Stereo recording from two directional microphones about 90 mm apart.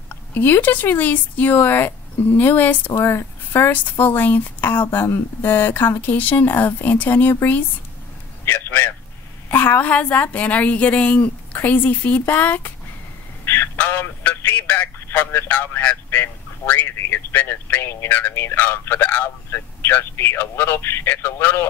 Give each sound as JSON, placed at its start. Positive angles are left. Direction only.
{"t": 0.1, "sound": "speech", "side_deg": 20}
{"t": 8.5, "sound": "a sound", "side_deg": 25}
{"t": 9.5, "sound": "a woman's voice", "side_deg": 20}